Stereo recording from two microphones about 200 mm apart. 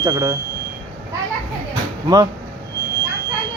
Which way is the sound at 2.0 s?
20° right (ahead or behind).